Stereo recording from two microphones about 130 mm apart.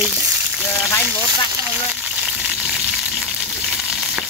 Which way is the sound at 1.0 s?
15° right (ahead or behind).